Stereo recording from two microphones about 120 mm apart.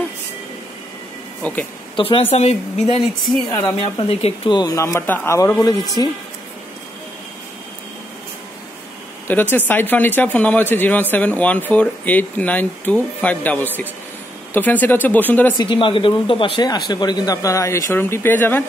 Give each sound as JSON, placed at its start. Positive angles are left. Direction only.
{"t": 1.4, "sound": "speech", "side_deg": 10}
{"t": 2.0, "sound": "speech", "side_deg": 50}
{"t": 2.3, "sound": "a woman's voice", "side_deg": 60}
{"t": 3.4, "sound": "speech", "side_deg": 40}
{"t": 9.3, "sound": "speech", "side_deg": 15}
{"t": 15.5, "sound": "speech", "side_deg": 45}